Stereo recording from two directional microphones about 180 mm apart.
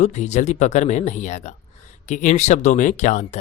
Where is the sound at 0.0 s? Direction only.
40° left (ahead or behind).